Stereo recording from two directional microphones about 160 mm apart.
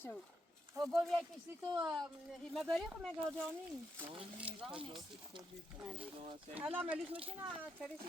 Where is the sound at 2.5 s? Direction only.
Centre (ahead or behind).